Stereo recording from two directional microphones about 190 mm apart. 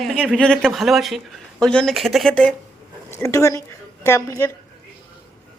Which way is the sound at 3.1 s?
15° left (ahead or behind).